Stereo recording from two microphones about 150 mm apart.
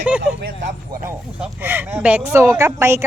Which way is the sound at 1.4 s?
15° right (ahead or behind).